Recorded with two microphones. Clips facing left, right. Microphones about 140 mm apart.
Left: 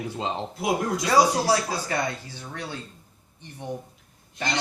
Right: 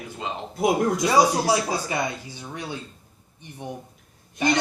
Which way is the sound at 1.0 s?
15° right (ahead or behind).